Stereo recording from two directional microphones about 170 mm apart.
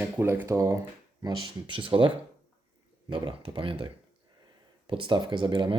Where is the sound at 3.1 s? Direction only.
30° right (ahead or behind).